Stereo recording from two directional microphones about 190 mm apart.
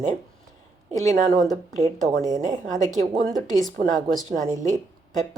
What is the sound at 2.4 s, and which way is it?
Speech, 40° right (ahead or behind).